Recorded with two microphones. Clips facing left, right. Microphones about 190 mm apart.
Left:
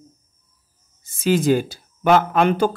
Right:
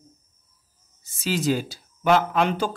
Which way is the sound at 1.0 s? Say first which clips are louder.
Left 6 dB; 55° left (ahead or behind).